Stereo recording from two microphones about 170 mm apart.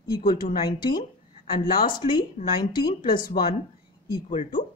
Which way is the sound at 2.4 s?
40° left (ahead or behind).